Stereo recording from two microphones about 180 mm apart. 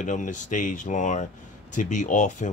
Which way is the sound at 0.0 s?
45° left (ahead or behind).